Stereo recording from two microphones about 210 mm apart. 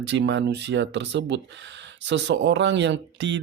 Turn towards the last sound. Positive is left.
turn(degrees=-60)  # may be behind; listen again after turning